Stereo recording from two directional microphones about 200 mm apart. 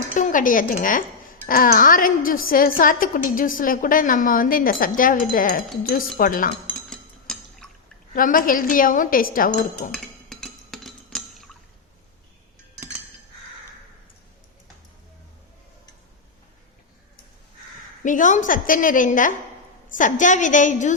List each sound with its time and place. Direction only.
0.1 s a woman's voice: 40° left (ahead or behind)
6.7 s liquid: 5° left (ahead or behind)
8.1 s a woman's voice: 45° left (ahead or behind)
9.9 s dishes: centre (ahead or behind)
18.0 s a woman's voice: 40° left (ahead or behind)